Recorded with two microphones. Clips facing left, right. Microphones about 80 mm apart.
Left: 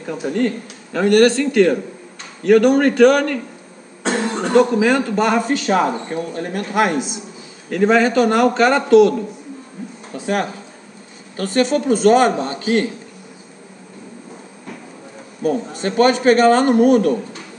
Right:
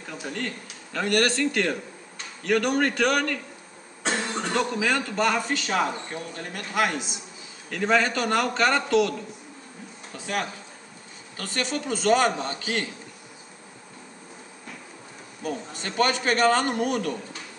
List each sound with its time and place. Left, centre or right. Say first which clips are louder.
0.0 s a man's voice: left 13 dB; centre
0.9 s a man's voice: left 11 dB; centre
4.0 s cough: left 8 dB; left
4.6 s a man's voice: left 12 dB; centre
5.5 s a man's voice: left 9 dB; left
6.7 s a man's voice: left 7 dB; left
11.3 s a man's voice: left 12 dB; left
15.8 s a man's voice: left 10 dB; left